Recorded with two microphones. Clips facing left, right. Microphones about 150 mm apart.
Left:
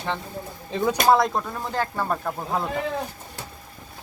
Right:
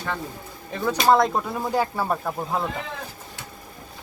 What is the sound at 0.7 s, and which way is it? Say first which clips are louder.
Speech: left 2 dB; 20° left (ahead or behind).